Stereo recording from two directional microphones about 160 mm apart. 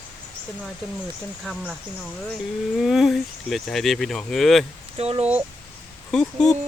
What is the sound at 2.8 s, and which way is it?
Speech, centre (ahead or behind).